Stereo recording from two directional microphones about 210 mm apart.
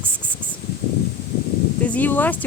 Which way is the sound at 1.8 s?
5° left (ahead or behind).